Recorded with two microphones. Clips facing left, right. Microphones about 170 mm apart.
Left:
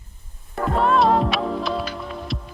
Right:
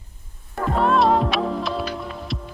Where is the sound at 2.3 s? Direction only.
Centre (ahead or behind).